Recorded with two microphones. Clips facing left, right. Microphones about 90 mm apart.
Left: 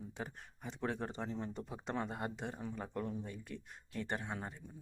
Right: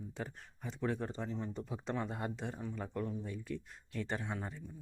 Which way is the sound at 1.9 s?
15° left (ahead or behind).